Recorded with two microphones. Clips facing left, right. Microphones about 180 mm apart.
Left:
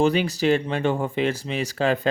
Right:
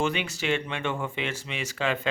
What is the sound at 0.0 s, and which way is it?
A man's voice, 35° left (ahead or behind).